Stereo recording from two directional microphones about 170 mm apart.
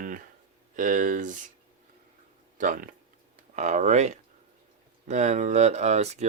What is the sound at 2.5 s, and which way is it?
Speech, 50° right (ahead or behind).